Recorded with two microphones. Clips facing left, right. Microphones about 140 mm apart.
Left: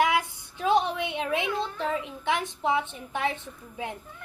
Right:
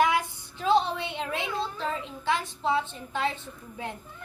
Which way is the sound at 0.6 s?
15° left (ahead or behind).